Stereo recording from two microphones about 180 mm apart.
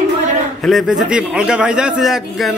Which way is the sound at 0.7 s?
Centre (ahead or behind).